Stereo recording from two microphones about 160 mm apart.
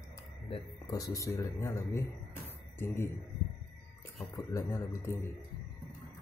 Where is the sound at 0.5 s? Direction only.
30° left (ahead or behind).